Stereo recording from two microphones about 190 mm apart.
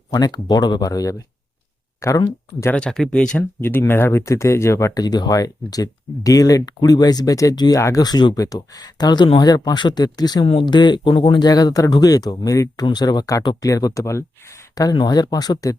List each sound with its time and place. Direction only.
0.1 s speech: 20° left (ahead or behind)